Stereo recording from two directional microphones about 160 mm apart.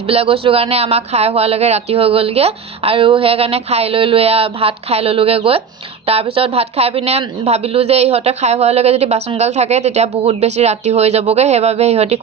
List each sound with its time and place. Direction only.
0.0 s a woman's voice: 40° right (ahead or behind)